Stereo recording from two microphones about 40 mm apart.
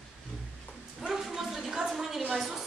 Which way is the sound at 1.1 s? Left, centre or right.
Centre.